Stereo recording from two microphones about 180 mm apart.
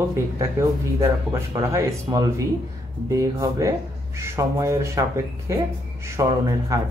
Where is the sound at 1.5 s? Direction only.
20° right (ahead or behind).